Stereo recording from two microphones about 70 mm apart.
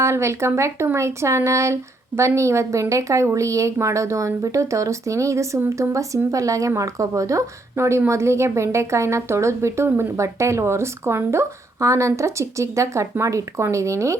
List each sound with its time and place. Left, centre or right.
0.0 s a woman's voice: right